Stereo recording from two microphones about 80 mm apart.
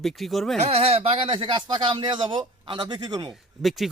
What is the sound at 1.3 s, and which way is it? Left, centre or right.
A man's voice, right.